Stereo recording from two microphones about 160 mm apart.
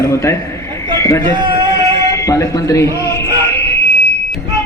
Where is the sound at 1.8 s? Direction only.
20° left (ahead or behind).